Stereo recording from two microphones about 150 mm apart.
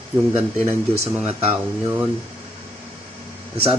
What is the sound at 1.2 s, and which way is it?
Speech, 40° right (ahead or behind).